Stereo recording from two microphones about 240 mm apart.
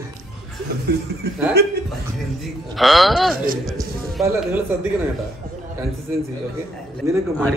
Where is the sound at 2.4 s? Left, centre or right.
Centre.